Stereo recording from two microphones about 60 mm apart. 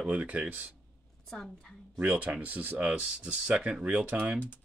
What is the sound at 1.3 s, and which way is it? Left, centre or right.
Speech, centre.